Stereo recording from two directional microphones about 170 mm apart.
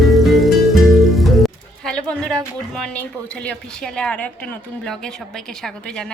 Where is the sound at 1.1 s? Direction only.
Centre (ahead or behind).